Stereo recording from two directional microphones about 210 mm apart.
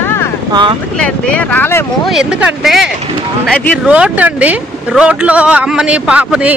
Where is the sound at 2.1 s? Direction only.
5° right (ahead or behind).